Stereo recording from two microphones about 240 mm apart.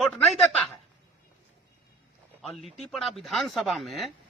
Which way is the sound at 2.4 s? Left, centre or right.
Centre.